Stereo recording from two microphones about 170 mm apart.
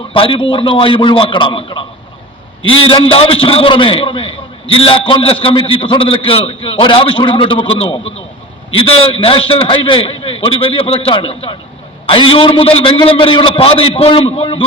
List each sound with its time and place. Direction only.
0.1 s a man's voice: 30° left (ahead or behind)
2.8 s a man's voice: 35° left (ahead or behind)